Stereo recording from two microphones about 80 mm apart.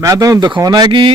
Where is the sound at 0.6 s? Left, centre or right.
Right.